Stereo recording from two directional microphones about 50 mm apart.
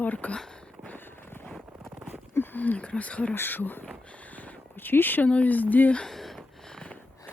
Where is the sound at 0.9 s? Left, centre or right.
Left.